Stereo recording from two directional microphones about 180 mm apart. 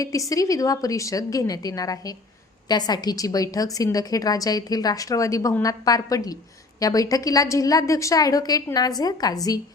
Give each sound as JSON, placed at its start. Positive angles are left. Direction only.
{"t": 0.0, "sound": "a woman's voice", "side_deg": 20}